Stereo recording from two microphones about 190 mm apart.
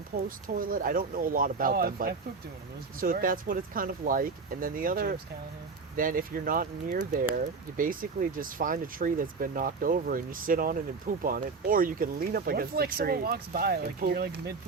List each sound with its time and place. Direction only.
0.3 s speech: 45° right (ahead or behind)